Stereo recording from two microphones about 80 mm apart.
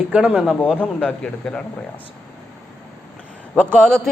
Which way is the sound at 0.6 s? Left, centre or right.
Centre.